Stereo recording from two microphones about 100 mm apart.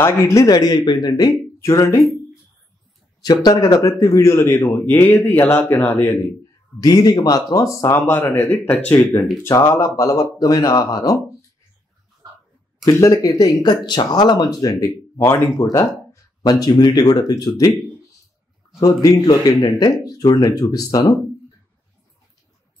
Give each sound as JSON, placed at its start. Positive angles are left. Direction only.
{"t": 0.0, "sound": "speech", "side_deg": 30}
{"t": 3.2, "sound": "a man's voice", "side_deg": 40}
{"t": 6.8, "sound": "speech", "side_deg": 40}
{"t": 8.6, "sound": "speech", "side_deg": 15}
{"t": 9.4, "sound": "speech", "side_deg": 30}
{"t": 12.8, "sound": "speech", "side_deg": 35}
{"t": 15.1, "sound": "a man's voice", "side_deg": 25}
{"t": 16.4, "sound": "speech", "side_deg": 40}
{"t": 18.8, "sound": "speech", "side_deg": 35}